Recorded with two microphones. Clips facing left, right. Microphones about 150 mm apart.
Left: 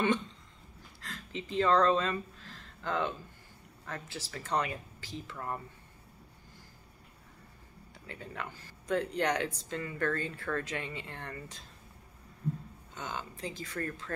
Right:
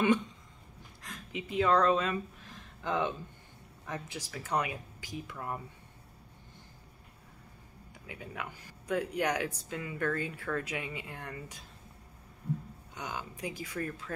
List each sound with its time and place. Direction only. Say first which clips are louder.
1.0 s speech: even; 15° right (ahead or behind)
8.1 s speech: even; 10° right (ahead or behind)
12.9 s speech: even; 10° right (ahead or behind)